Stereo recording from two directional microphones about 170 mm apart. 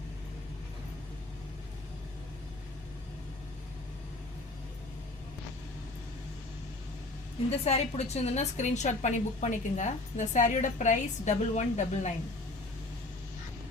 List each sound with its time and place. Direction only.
7.6 s a woman's voice: 40° left (ahead or behind)